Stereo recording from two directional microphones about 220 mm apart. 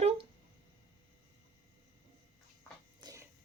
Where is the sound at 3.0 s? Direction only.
15° right (ahead or behind).